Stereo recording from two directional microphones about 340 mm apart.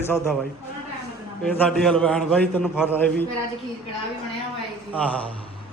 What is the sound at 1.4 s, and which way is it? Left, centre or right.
A man's voice, centre.